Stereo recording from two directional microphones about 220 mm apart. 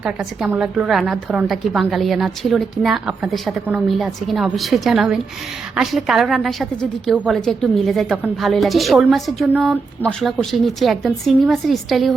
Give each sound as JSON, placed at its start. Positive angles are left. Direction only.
{"t": 0.0, "sound": "a woman's voice", "side_deg": -5}